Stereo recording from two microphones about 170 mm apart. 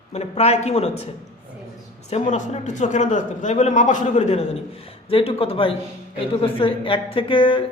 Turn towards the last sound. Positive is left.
turn(degrees=30)  # may be behind; listen again after turning